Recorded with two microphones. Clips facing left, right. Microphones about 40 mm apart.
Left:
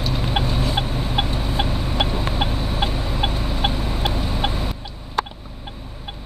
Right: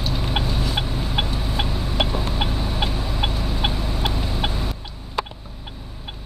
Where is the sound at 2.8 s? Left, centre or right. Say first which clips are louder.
Left 2 dB; left.